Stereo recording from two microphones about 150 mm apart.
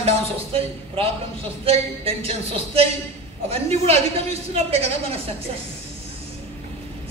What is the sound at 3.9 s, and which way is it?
A woman's voice, 40° right (ahead or behind).